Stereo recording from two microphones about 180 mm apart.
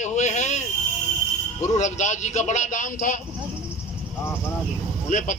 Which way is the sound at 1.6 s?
40° left (ahead or behind).